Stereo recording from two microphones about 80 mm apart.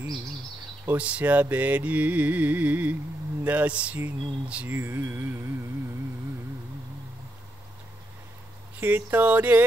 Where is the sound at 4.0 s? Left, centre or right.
Centre.